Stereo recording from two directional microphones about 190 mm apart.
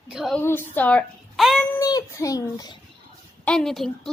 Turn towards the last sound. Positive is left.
turn(degrees=0)  # may be behind; listen again after turning